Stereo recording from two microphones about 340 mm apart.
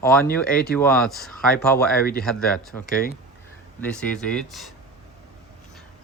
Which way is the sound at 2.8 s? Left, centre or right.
Left.